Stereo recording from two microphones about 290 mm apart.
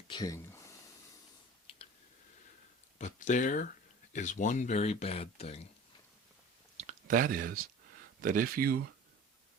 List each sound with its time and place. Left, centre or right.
0.1 s a sound: centre
3.0 s speech: left
6.7 s speech: right